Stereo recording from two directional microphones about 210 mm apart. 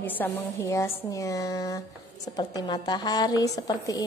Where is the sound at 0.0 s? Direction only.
10° left (ahead or behind).